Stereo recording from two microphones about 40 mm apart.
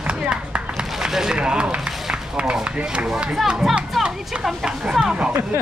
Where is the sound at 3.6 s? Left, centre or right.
Centre.